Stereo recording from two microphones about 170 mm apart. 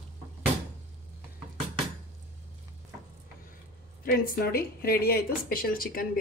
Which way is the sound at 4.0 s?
60° left (ahead or behind).